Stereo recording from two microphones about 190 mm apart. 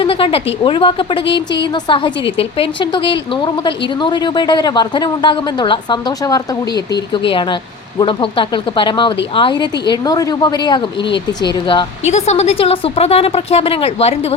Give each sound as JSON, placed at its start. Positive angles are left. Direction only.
{"t": 0.0, "sound": "a sound", "side_deg": 30}
{"t": 0.6, "sound": "a woman's voice", "side_deg": 25}
{"t": 12.0, "sound": "a woman's voice", "side_deg": 35}